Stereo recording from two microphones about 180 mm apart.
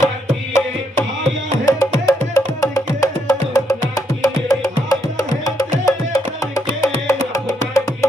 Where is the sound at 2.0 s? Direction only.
20° left (ahead or behind).